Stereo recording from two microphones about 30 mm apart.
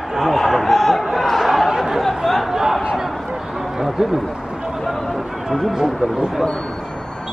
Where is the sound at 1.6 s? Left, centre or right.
Centre.